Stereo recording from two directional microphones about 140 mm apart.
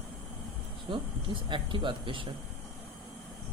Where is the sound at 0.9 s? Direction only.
35° right (ahead or behind).